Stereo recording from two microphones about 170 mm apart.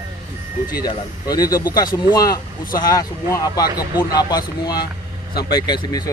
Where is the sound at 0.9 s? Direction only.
20° left (ahead or behind).